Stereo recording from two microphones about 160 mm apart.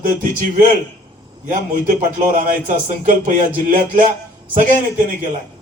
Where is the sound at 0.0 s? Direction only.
55° right (ahead or behind).